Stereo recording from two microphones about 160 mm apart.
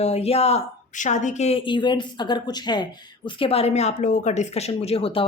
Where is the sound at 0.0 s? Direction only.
40° left (ahead or behind).